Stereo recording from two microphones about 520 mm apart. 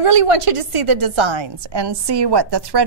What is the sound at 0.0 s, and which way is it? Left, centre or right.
A woman's voice, right.